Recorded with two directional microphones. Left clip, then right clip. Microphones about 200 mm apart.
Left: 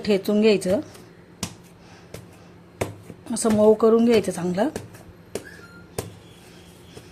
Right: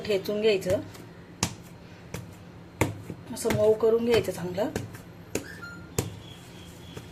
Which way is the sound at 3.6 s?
55° left (ahead or behind).